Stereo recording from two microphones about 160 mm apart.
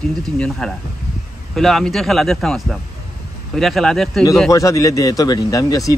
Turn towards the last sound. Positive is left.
turn(degrees=20)  # may be behind; listen again after turning